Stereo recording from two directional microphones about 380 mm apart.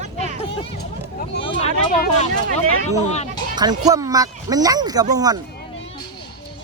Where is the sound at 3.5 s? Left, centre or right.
Centre.